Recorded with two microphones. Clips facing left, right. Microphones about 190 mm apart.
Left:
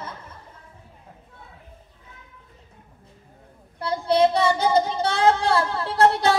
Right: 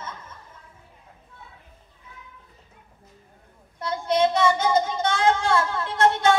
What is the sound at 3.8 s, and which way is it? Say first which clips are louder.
Child singing: left 3 dB; 35° left (ahead or behind).